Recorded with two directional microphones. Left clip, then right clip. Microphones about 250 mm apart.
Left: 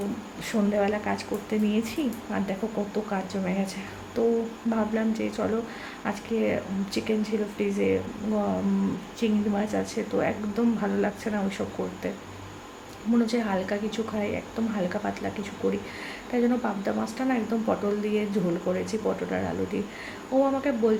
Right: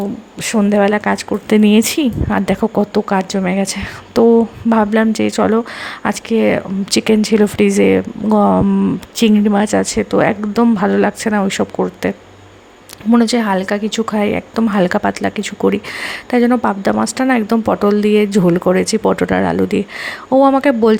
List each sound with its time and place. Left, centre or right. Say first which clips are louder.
0.4 s a woman's voice: right 12 dB; right
9.1 s a woman's voice: right 14 dB; right